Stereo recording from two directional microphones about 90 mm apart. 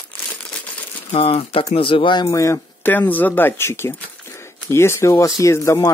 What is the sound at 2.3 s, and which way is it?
Speech, 40° left (ahead or behind).